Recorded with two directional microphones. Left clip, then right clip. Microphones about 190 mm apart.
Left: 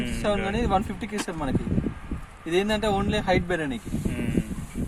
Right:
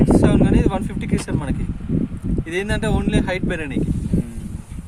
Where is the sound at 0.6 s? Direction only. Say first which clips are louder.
Right 3 dB; 5° right (ahead or behind).